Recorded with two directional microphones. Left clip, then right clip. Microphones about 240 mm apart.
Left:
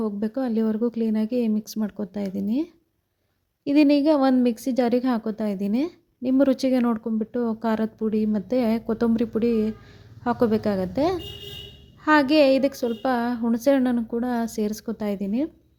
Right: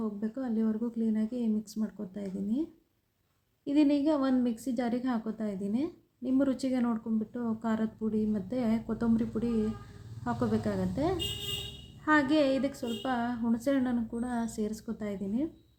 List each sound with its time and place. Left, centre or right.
0.0 s a woman's voice: left